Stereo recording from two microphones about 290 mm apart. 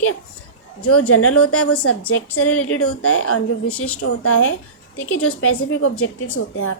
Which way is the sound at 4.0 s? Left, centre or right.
Left.